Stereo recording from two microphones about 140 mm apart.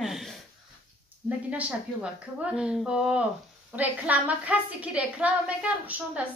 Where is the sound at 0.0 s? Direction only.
Centre (ahead or behind).